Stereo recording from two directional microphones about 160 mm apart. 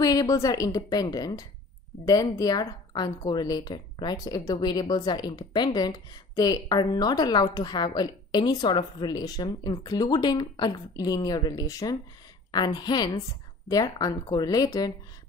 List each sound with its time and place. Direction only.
0.0 s a woman's voice: 25° left (ahead or behind)